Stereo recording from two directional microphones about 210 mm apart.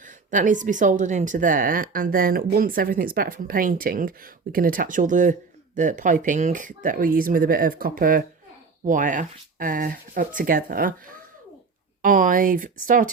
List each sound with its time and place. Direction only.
0.0 s speech: 40° right (ahead or behind)
12.0 s speech: 40° right (ahead or behind)